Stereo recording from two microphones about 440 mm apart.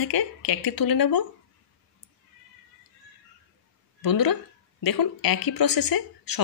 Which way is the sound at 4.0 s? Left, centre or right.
Left.